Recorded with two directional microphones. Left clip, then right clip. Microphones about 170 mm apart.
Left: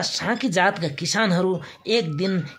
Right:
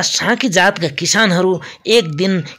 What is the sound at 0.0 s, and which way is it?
Speech, 40° right (ahead or behind).